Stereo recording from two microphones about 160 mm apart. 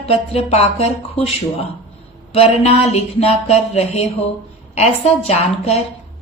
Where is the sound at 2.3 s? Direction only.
40° left (ahead or behind).